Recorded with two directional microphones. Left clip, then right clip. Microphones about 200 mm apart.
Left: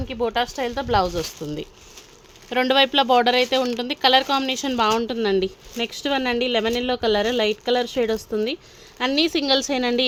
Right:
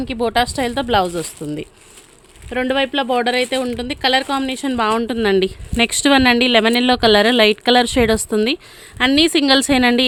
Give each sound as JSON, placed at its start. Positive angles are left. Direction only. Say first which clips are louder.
{"t": 0.1, "sound": "speech", "louder": "right 5 dB", "side_deg": -55}
{"t": 2.5, "sound": "a woman's voice", "louder": "even", "side_deg": -10}